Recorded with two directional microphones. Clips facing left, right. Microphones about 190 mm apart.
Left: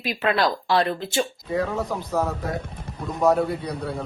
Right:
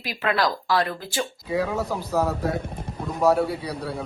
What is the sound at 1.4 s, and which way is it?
A man's voice, centre (ahead or behind).